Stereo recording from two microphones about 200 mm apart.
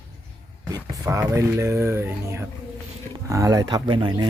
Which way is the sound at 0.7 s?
15° right (ahead or behind).